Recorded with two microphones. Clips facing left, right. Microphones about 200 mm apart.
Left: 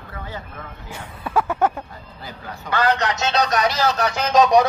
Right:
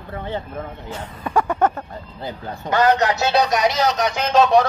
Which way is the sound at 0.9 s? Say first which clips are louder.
Even; 10° left (ahead or behind).